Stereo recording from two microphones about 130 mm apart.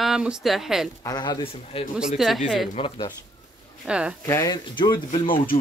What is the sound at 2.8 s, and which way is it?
Speech, 45° left (ahead or behind).